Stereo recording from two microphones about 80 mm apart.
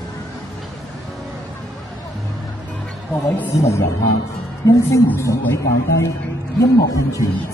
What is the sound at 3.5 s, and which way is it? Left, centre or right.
Speech, left.